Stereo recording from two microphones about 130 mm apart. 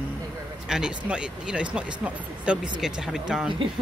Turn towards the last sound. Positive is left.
turn(degrees=-5)  # may be behind; listen again after turning